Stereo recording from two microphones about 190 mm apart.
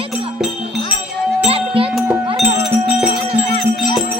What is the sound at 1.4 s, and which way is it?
Music, 30° right (ahead or behind).